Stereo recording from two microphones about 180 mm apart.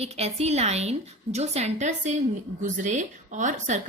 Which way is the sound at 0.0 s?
35° right (ahead or behind).